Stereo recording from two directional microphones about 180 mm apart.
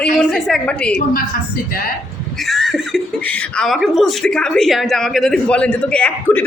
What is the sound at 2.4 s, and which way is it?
Speech, centre (ahead or behind).